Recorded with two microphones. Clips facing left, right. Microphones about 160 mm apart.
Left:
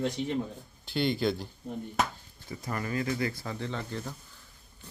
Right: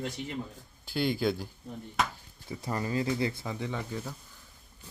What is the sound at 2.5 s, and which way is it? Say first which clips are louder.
Speech: right 1 dB; 25° right (ahead or behind).